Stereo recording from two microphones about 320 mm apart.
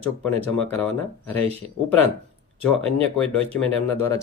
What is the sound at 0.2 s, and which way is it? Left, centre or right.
Speech, centre.